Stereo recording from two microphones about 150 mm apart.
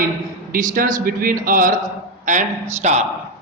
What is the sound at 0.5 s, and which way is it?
A man's voice, 65° right (ahead or behind).